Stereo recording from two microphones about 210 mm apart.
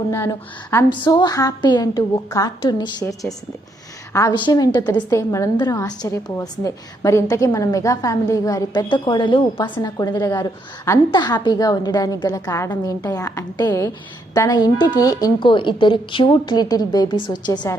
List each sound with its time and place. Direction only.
0.7 s a woman's voice: 15° left (ahead or behind)